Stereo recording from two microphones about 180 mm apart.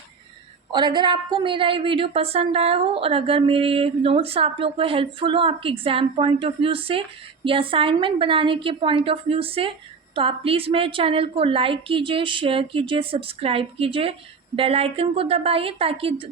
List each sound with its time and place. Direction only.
0.7 s a woman's voice: 25° right (ahead or behind)